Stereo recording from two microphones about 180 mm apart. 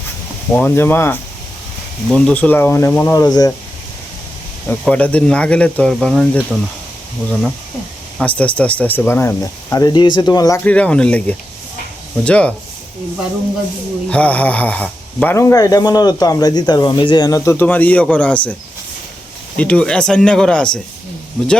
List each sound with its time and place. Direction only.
0.5 s speech: 10° left (ahead or behind)
4.7 s speech: 5° left (ahead or behind)
8.2 s speech: 5° left (ahead or behind)
10.6 s speech: 5° left (ahead or behind)
14.1 s speech: 10° left (ahead or behind)
19.5 s speech: 5° left (ahead or behind)